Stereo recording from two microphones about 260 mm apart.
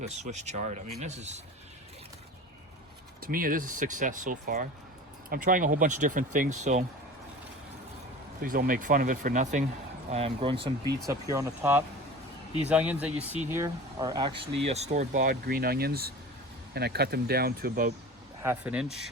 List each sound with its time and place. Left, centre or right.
0.0 s speech: right
3.2 s speech: right
8.4 s speech: right
18.4 s speech: centre